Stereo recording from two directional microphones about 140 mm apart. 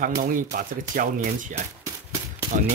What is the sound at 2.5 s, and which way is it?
Speech, 65° right (ahead or behind).